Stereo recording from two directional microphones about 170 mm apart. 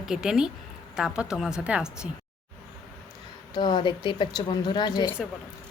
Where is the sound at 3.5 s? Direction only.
25° left (ahead or behind).